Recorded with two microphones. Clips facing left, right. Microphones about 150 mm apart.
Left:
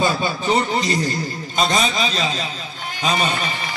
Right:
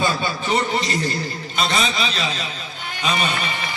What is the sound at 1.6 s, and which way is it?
A man's voice, 40° left (ahead or behind).